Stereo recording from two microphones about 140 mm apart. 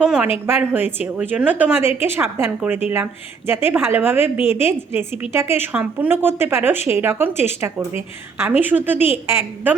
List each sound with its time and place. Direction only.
0.0 s a woman's voice: 5° right (ahead or behind)